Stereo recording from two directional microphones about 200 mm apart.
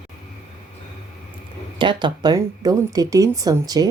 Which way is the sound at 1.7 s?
25° right (ahead or behind).